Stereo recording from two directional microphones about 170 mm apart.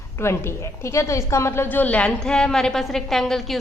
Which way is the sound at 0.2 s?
15° left (ahead or behind).